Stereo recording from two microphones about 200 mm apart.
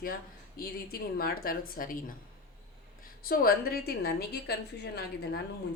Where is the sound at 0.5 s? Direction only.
50° left (ahead or behind).